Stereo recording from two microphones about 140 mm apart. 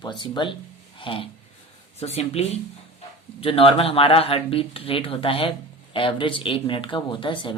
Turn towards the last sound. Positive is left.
turn(degrees=35)  # may be behind; listen again after turning